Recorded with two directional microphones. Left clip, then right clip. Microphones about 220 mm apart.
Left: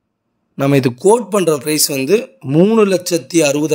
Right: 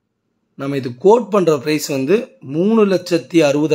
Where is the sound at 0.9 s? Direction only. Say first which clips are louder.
Even; centre (ahead or behind).